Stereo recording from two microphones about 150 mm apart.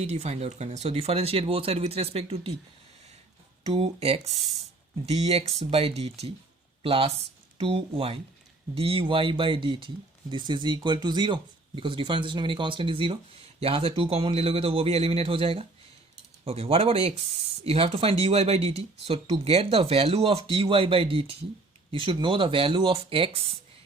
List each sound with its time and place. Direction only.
0.0 s speech: 45° right (ahead or behind)
3.7 s speech: 45° right (ahead or behind)